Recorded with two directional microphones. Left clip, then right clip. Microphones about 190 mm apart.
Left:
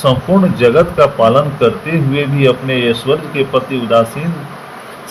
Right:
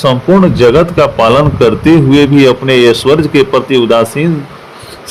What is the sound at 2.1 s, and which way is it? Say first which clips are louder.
A man's voice: right 6 dB; 65° right (ahead or behind).